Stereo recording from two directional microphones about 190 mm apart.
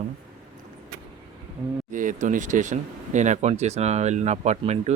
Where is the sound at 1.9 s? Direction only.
45° right (ahead or behind).